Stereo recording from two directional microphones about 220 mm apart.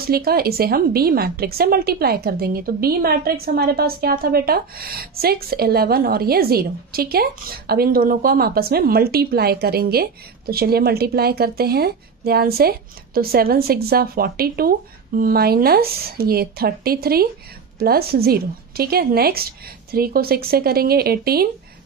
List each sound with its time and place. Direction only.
0.0 s a woman's voice: 45° right (ahead or behind)